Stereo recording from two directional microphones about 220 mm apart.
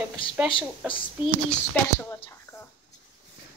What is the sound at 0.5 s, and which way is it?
Speech, 25° left (ahead or behind).